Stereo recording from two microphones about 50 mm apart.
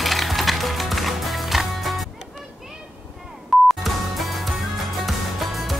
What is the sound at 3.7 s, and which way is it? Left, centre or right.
Music, centre.